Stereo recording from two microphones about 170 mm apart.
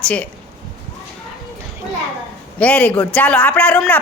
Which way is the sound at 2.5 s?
5° left (ahead or behind).